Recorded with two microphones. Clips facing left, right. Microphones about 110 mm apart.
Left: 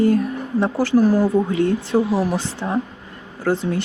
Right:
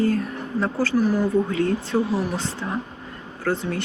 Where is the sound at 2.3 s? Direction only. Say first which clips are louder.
Left 4 dB; 90° left.